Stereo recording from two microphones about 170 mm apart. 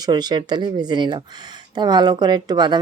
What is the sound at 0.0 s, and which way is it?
Speech, 25° right (ahead or behind).